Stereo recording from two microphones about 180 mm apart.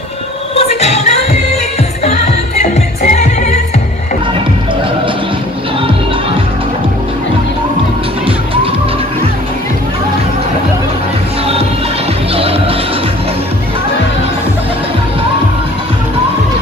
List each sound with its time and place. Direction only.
0.6 s music: 35° left (ahead or behind)
3.0 s music: 40° left (ahead or behind)